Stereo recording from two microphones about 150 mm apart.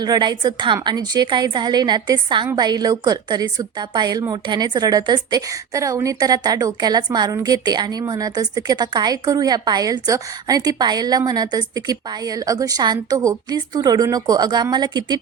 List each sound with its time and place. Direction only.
0.0 s a woman's voice: 30° right (ahead or behind)